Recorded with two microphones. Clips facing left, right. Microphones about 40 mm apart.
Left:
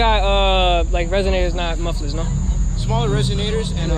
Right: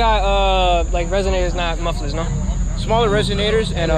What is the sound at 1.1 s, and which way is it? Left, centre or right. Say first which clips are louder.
Speech: even; centre.